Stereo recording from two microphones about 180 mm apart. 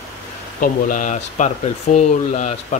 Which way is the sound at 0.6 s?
50° left (ahead or behind).